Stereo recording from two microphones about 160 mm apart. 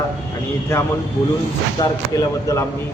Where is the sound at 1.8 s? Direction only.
20° left (ahead or behind).